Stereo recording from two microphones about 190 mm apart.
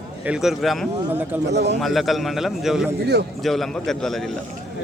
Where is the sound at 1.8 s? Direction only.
Centre (ahead or behind).